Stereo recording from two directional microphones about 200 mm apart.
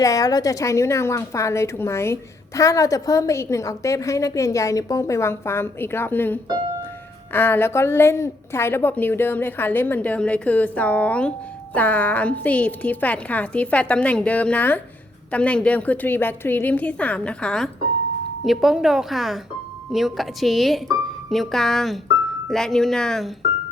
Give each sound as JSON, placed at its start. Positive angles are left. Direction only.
{"t": 0.0, "sound": "a woman's voice", "side_deg": 15}